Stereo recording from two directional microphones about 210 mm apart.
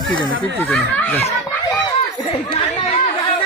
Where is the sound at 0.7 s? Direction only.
5° left (ahead or behind).